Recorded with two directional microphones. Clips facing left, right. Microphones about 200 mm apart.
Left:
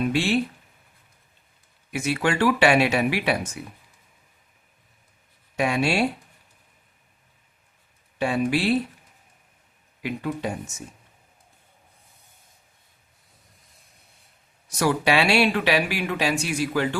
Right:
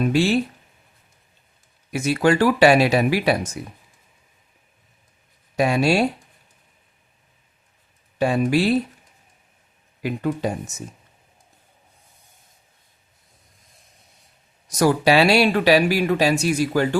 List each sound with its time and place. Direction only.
0.0 s speech: 40° right (ahead or behind)
1.9 s speech: 40° right (ahead or behind)
5.5 s speech: 35° right (ahead or behind)
8.2 s speech: 40° right (ahead or behind)
10.0 s speech: 45° right (ahead or behind)
14.8 s speech: 40° right (ahead or behind)